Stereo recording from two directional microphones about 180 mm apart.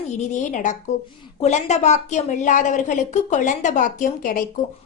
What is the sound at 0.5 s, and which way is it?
A woman's voice, 45° left (ahead or behind).